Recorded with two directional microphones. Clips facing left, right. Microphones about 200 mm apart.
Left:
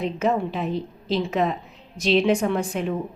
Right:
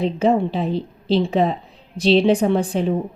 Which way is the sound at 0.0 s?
30° right (ahead or behind).